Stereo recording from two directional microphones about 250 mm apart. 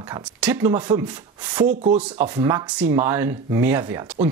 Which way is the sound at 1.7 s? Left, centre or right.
Right.